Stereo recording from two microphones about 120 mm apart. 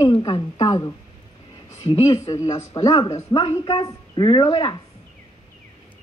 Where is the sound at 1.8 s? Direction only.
50° left (ahead or behind).